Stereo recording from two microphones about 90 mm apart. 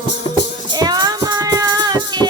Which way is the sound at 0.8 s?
50° right (ahead or behind).